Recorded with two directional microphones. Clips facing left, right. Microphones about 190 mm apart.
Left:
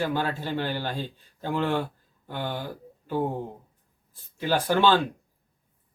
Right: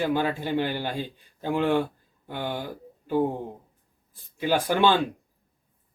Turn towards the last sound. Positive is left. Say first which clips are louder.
# even
turn(degrees=-15)  # may be behind; listen again after turning